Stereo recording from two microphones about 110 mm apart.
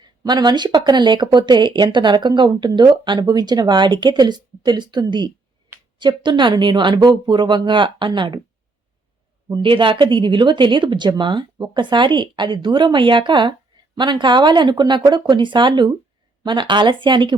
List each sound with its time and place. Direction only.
0.0 s speech: 40° right (ahead or behind)
9.5 s speech: 50° right (ahead or behind)